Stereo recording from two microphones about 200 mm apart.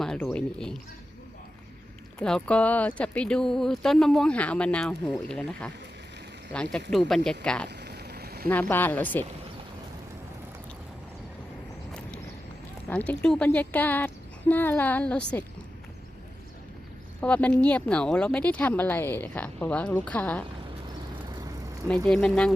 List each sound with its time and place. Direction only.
0.0 s speech: centre (ahead or behind)
2.1 s speech: 5° left (ahead or behind)
7.8 s a sound: 55° right (ahead or behind)
8.4 s speech: 10° left (ahead or behind)
11.9 s horse: 5° left (ahead or behind)
12.9 s speech: 5° left (ahead or behind)
17.2 s speech: 5° left (ahead or behind)
22.0 s speech: 5° left (ahead or behind)